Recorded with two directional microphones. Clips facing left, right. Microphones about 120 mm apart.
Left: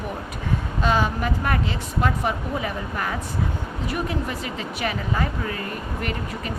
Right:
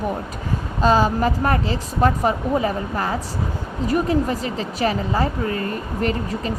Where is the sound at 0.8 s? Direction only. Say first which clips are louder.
Right 6 dB; 35° right (ahead or behind).